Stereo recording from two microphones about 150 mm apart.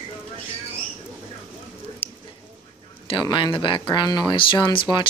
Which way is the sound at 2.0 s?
40° left (ahead or behind).